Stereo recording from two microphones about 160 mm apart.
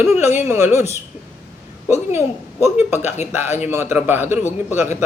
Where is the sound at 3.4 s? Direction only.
45° left (ahead or behind).